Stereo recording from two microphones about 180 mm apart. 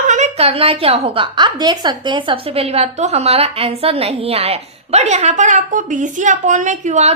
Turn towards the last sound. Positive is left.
turn(degrees=-40)  # may be behind; listen again after turning